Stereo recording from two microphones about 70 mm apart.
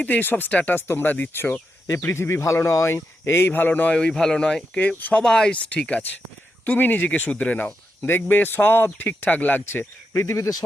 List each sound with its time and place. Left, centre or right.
0.0 s speech: left
3.9 s speech: centre
5.2 s speech: centre
10.1 s speech: left